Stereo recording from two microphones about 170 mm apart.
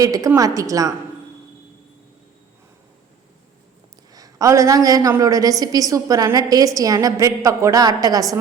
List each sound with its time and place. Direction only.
0.0 s a woman's voice: 20° right (ahead or behind)
4.1 s a woman's voice: 20° right (ahead or behind)